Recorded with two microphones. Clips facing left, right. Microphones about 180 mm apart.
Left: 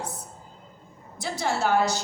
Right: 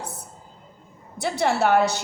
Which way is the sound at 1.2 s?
60° right (ahead or behind).